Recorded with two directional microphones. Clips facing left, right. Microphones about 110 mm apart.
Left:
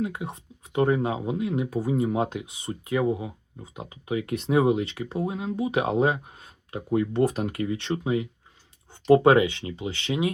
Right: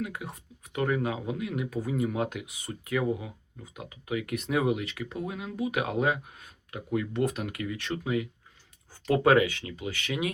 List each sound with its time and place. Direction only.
0.0 s speech: 25° left (ahead or behind)